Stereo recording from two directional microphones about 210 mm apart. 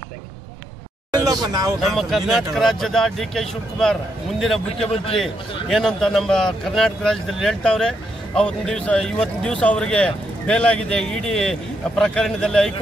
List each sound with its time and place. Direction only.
1.1 s a sound: 20° right (ahead or behind)
1.8 s speech: centre (ahead or behind)
4.8 s a man's voice: 30° left (ahead or behind)
5.7 s speech: centre (ahead or behind)